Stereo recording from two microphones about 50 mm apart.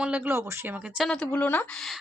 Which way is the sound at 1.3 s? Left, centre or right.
Left.